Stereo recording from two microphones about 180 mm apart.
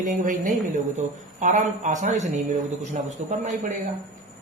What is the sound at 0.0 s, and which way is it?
A man's voice, 45° right (ahead or behind).